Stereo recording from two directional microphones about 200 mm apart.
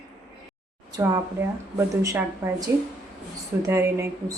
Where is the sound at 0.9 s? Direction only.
15° right (ahead or behind).